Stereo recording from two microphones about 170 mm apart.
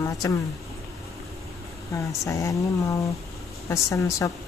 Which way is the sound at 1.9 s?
20° left (ahead or behind).